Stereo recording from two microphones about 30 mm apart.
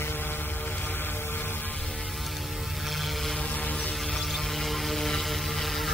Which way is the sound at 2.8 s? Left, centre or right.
Centre.